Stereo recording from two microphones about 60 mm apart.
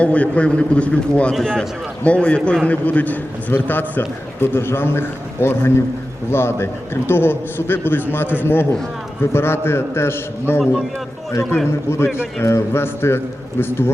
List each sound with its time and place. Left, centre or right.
0.0 s a man's voice: left
2.0 s a man's voice: left